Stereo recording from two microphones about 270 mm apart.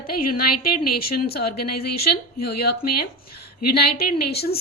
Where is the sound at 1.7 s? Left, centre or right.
Left.